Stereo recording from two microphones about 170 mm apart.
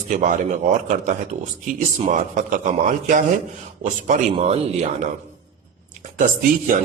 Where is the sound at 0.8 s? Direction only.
45° right (ahead or behind).